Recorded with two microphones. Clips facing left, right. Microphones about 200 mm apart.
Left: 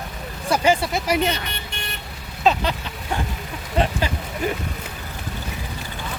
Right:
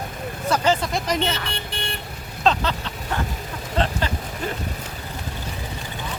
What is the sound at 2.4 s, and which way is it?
Speech, 10° left (ahead or behind).